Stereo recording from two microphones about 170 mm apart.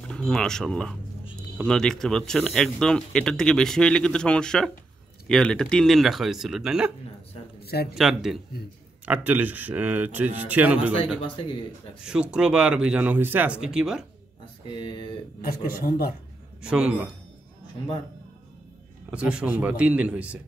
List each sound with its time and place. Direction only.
0.1 s speech: 5° left (ahead or behind)
7.6 s speech: 65° left (ahead or behind)
7.9 s speech: centre (ahead or behind)
12.0 s speech: 5° right (ahead or behind)
14.7 s speech: 25° left (ahead or behind)
15.4 s a man's voice: 55° left (ahead or behind)
16.6 s speech: 5° right (ahead or behind)
19.0 s speech: 5° right (ahead or behind)